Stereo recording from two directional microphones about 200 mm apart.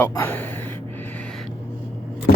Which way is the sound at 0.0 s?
10° left (ahead or behind).